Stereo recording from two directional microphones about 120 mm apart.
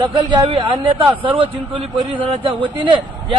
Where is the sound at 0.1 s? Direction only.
35° right (ahead or behind).